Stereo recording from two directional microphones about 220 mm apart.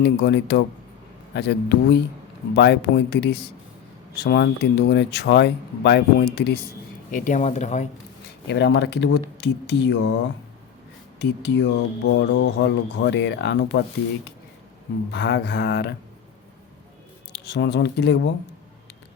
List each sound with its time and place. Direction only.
0.0 s speech: 50° left (ahead or behind)
7.1 s speech: 35° left (ahead or behind)
8.4 s speech: 50° left (ahead or behind)
15.1 s speech: 50° left (ahead or behind)
17.3 s speech: 50° left (ahead or behind)